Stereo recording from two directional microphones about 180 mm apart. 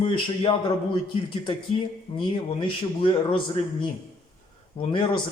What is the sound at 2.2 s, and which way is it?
Speech, 30° left (ahead or behind).